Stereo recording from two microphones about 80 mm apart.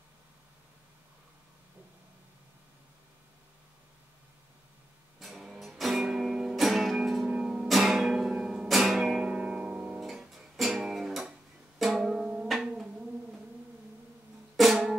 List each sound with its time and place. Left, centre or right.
5.2 s music: centre
12.4 s a sound: centre
14.6 s drum: centre